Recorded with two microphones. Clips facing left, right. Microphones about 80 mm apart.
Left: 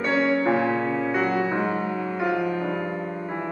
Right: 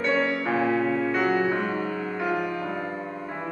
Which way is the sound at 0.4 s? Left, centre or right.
Centre.